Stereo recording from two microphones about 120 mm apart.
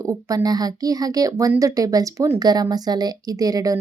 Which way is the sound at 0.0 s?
30° right (ahead or behind).